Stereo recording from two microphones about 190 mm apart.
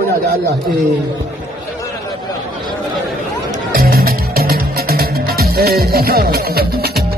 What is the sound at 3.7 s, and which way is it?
Music, 50° right (ahead or behind).